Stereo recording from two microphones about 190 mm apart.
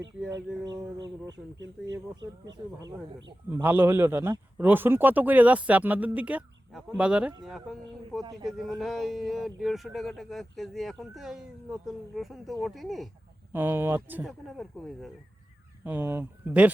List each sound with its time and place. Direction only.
1.5 s speech: 70° right (ahead or behind)
3.5 s a man's voice: 10° right (ahead or behind)
8.2 s speech: 20° right (ahead or behind)
8.4 s speech: centre (ahead or behind)
13.5 s a man's voice: 10° right (ahead or behind)
14.4 s speech: centre (ahead or behind)
15.8 s a man's voice: 10° right (ahead or behind)